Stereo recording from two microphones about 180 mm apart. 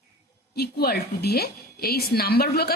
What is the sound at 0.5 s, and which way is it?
A woman's voice, 60° left (ahead or behind).